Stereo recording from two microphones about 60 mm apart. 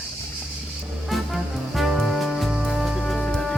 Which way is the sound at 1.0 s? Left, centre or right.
Centre.